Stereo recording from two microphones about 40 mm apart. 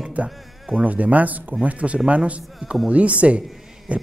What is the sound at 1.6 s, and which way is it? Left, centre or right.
Speech, right.